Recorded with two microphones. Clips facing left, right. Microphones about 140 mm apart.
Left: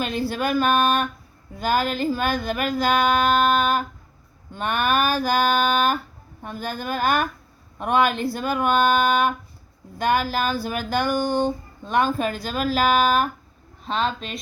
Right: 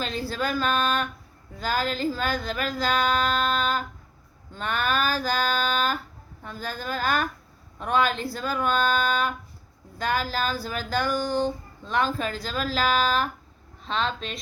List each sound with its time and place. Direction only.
0.3 s music: 20° left (ahead or behind)
11.0 s speech: 65° left (ahead or behind)
11.8 s a woman's voice: 15° left (ahead or behind)
12.1 s music: 20° left (ahead or behind)
13.8 s a woman's voice: 10° left (ahead or behind)